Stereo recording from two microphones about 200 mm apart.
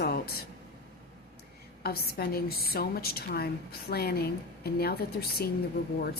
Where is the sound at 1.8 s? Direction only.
50° left (ahead or behind).